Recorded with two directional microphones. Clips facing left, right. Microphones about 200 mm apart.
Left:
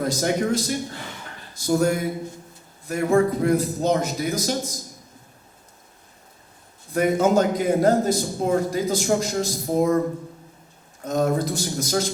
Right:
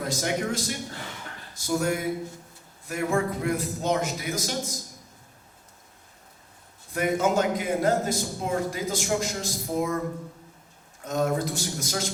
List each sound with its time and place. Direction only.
0.0 s a man's voice: 40° left (ahead or behind)
6.9 s a man's voice: 35° left (ahead or behind)
11.0 s a man's voice: 35° left (ahead or behind)